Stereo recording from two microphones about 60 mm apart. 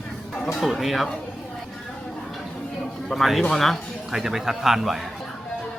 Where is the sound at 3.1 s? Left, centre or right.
Centre.